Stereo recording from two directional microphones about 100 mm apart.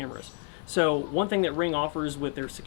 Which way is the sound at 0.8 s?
15° left (ahead or behind).